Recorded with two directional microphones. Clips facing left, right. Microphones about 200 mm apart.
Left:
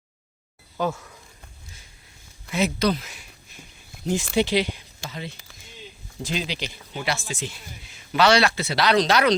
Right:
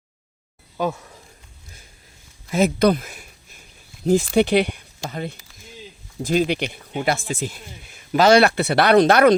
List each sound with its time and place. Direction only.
0.8 s speech: 15° right (ahead or behind)
2.5 s speech: 50° right (ahead or behind)
4.0 s speech: 35° right (ahead or behind)
4.4 s speech: 60° right (ahead or behind)